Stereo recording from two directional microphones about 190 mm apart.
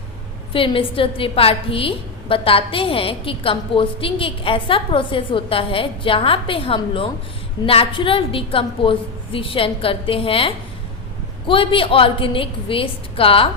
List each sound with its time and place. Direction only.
0.5 s a woman's voice: 30° left (ahead or behind)